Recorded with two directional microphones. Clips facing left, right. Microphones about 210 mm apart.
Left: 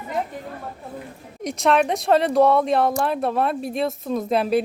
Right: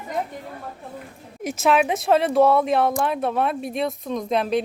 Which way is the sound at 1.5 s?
5° right (ahead or behind).